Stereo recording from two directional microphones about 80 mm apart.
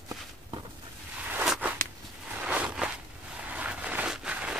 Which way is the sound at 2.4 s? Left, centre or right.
Centre.